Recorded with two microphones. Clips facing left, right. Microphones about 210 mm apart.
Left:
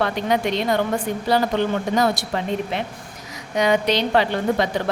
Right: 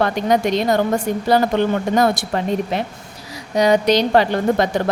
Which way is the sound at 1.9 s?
50° right (ahead or behind).